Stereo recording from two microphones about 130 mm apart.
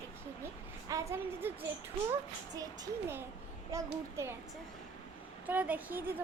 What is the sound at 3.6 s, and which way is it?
Speech, 25° right (ahead or behind).